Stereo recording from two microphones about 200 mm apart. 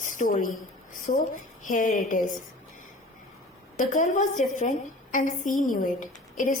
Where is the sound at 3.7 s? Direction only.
40° left (ahead or behind).